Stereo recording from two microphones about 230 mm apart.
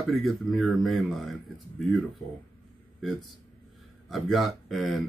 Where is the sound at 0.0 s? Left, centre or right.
Centre.